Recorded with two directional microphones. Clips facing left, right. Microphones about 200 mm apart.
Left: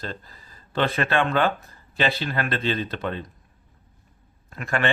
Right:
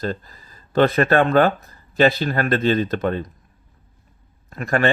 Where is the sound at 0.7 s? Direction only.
45° right (ahead or behind).